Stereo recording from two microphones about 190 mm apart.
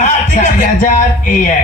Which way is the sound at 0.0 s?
40° left (ahead or behind).